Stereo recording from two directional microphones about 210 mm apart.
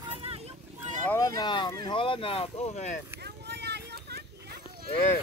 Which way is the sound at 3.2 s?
50° right (ahead or behind).